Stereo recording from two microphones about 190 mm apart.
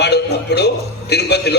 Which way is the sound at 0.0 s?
60° left (ahead or behind).